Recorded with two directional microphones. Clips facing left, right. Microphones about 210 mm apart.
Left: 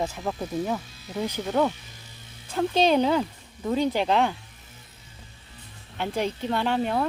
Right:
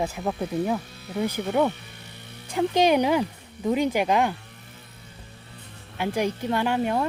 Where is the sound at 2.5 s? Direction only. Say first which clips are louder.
Right 1 dB; 15° right (ahead or behind).